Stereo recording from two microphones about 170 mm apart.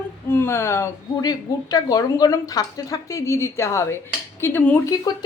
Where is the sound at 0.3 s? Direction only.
15° left (ahead or behind).